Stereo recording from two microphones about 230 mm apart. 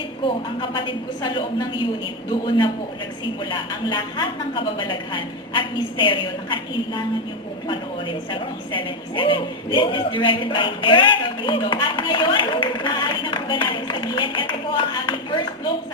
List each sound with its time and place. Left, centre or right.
0.3 s a woman's voice: left
3.5 s a woman's voice: centre